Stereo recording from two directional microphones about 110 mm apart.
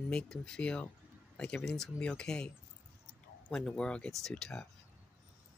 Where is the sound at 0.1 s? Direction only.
5° left (ahead or behind).